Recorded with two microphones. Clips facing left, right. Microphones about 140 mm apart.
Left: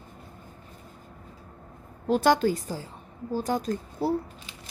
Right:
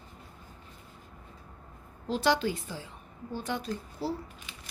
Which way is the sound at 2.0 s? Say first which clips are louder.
Left 6 dB; 50° left (ahead or behind).